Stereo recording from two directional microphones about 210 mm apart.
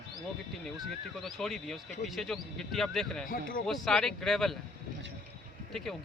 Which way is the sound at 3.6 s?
Centre (ahead or behind).